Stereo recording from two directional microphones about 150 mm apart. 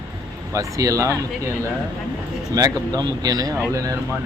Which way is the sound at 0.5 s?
20° right (ahead or behind).